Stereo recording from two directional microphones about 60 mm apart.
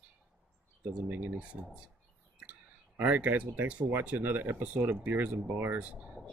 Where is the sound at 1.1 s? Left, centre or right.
Right.